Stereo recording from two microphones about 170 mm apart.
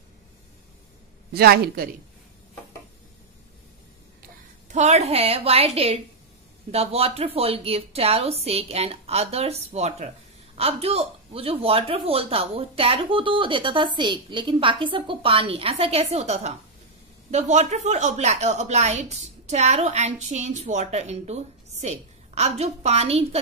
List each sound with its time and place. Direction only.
1.3 s a woman's voice: 65° right (ahead or behind)
4.6 s a woman's voice: 45° right (ahead or behind)